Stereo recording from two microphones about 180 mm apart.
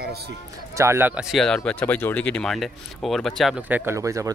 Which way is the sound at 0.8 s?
15° right (ahead or behind).